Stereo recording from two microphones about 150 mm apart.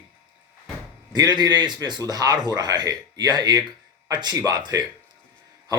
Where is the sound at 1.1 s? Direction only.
25° right (ahead or behind).